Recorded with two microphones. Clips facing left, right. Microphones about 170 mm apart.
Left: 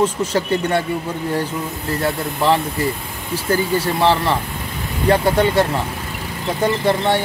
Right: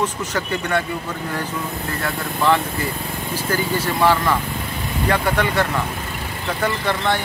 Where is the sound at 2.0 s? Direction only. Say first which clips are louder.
Left 1 dB; 30° left (ahead or behind).